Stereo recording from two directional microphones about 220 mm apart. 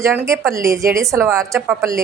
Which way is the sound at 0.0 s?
10° right (ahead or behind).